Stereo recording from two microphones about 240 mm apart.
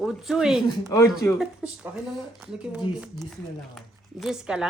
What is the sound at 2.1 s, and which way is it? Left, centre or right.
Speech, centre.